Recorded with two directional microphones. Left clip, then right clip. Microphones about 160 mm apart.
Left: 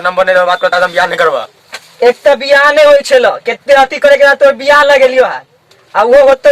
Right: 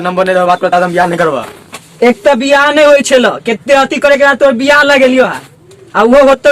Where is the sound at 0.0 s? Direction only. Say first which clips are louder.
Left 1 dB; 10° right (ahead or behind).